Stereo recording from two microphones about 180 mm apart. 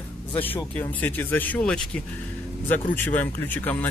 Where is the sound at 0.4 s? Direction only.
10° left (ahead or behind).